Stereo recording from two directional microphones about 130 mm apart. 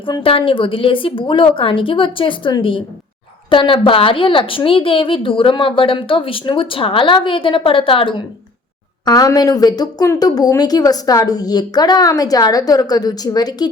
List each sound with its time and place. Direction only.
0.0 s a woman's voice: 40° left (ahead or behind)
9.0 s a woman's voice: 30° left (ahead or behind)